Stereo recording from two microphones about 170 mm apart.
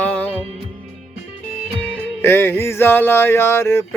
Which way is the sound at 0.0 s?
10° left (ahead or behind).